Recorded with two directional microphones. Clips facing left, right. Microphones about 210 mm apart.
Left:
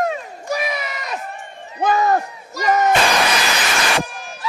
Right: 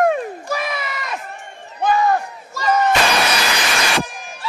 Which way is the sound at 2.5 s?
20° left (ahead or behind).